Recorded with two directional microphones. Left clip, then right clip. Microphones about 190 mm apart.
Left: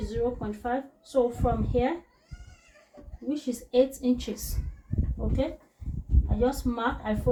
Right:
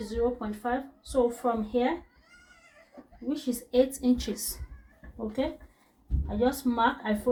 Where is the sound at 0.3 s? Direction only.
15° right (ahead or behind).